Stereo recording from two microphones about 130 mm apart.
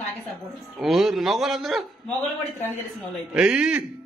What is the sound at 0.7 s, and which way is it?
A man's voice, centre (ahead or behind).